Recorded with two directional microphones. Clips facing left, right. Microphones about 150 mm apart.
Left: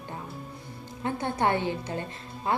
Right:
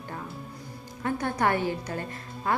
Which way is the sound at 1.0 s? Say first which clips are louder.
Right 1 dB; 20° left (ahead or behind).